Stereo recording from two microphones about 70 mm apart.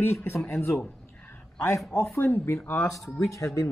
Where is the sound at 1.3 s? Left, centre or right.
Left.